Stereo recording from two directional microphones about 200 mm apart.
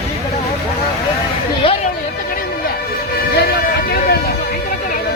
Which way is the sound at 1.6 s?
30° left (ahead or behind).